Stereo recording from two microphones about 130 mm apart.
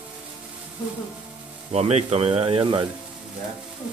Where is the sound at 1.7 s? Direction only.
55° right (ahead or behind); by 2.9 s 40° right (ahead or behind).